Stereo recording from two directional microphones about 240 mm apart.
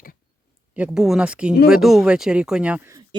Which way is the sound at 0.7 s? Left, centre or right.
Centre.